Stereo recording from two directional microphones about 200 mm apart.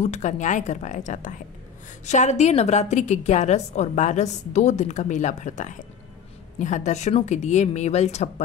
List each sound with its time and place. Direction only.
0.0 s a woman's voice: 35° left (ahead or behind)